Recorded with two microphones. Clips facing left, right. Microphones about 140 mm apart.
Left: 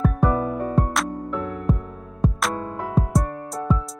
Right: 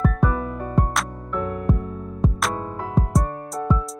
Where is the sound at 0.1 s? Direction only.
25° left (ahead or behind).